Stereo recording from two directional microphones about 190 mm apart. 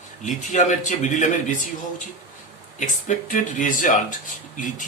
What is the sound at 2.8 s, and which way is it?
Speech, 40° left (ahead or behind).